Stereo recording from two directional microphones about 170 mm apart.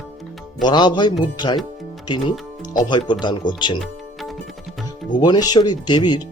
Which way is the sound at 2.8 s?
25° left (ahead or behind).